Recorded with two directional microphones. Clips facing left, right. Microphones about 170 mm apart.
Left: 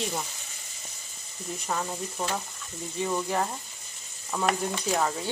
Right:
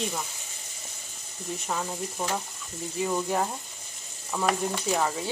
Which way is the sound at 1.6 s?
Centre (ahead or behind).